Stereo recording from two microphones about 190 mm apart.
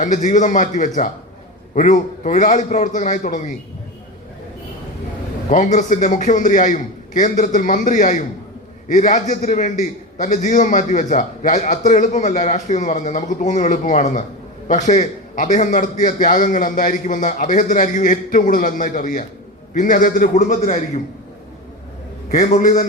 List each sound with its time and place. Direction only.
0.0 s a man's voice: 40° left (ahead or behind)
5.5 s a man's voice: 40° left (ahead or behind)
22.3 s a man's voice: 40° left (ahead or behind)